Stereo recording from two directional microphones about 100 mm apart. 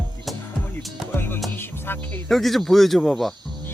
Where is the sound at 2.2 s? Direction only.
Centre (ahead or behind).